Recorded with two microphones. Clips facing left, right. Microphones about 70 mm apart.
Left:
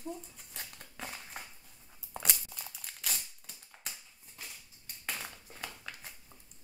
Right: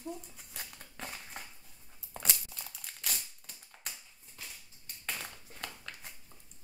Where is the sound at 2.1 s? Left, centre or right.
Centre.